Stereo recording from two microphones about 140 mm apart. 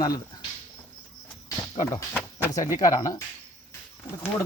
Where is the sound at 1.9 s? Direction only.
15° left (ahead or behind).